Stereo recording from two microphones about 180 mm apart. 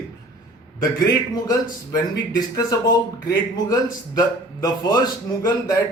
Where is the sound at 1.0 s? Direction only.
20° left (ahead or behind).